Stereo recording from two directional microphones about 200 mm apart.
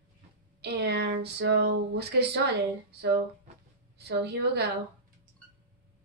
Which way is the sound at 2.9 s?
55° right (ahead or behind).